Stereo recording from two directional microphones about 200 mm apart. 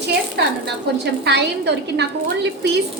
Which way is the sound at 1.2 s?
55° right (ahead or behind).